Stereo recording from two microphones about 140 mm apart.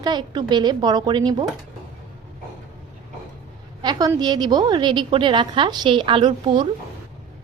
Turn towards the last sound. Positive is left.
turn(degrees=-35)  # may be behind; listen again after turning